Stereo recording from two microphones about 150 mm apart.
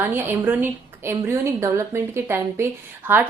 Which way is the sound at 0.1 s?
15° right (ahead or behind).